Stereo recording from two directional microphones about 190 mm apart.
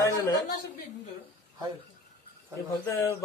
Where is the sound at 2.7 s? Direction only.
15° left (ahead or behind).